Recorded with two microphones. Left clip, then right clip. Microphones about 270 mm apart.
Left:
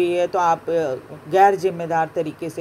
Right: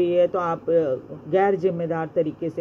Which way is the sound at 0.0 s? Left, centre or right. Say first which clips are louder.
Left 2 dB; left.